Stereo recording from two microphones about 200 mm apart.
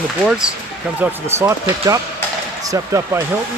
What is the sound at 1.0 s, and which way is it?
Speech, 10° right (ahead or behind).